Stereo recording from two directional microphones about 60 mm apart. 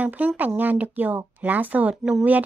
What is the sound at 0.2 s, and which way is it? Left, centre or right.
A woman's voice, right.